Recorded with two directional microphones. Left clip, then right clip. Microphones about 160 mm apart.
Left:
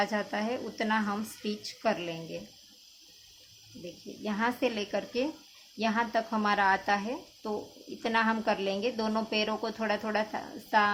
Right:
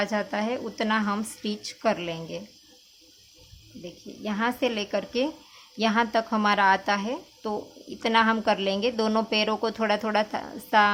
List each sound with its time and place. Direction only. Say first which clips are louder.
0.0 s a woman's voice: right 3 dB; 25° right (ahead or behind)
4.2 s a woman's voice: right 3 dB; 20° right (ahead or behind)